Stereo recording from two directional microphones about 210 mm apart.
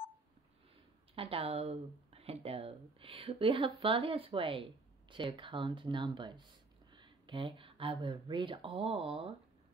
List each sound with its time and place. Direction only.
1.1 s speech: 25° right (ahead or behind)